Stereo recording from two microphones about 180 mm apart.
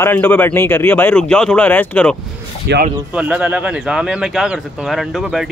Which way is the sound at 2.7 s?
70° right (ahead or behind).